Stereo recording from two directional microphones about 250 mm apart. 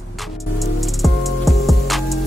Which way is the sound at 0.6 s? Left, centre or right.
Centre.